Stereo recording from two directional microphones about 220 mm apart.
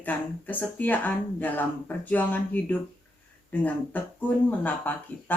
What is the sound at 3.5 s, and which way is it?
Speech, 5° left (ahead or behind).